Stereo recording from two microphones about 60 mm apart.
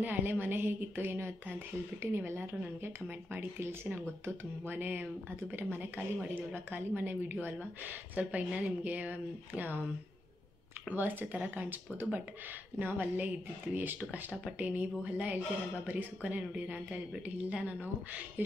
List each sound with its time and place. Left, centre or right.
0.0 s speech: right
3.3 s speech: right
4.6 s speech: right
10.9 s speech: right